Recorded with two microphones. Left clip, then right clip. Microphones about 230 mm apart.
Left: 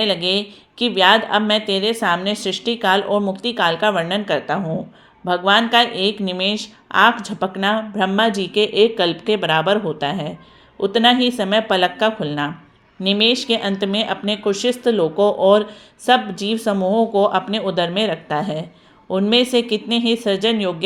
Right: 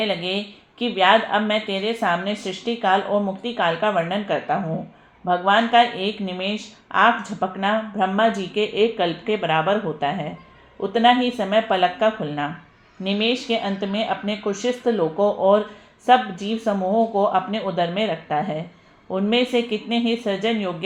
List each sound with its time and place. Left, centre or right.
0.0 s a woman's voice: left
14.1 s a woman's voice: left